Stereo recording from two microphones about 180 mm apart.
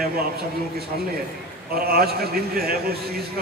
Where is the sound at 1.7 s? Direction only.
55° right (ahead or behind).